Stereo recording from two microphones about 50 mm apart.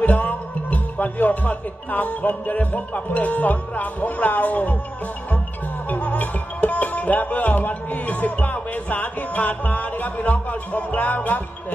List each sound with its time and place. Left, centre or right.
0.0 s music: left
5.9 s music: left